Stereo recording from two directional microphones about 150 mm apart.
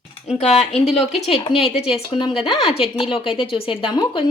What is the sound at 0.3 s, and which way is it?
Speech, 50° left (ahead or behind).